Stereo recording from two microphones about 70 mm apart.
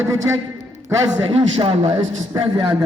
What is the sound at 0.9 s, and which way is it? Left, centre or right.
Speech, right.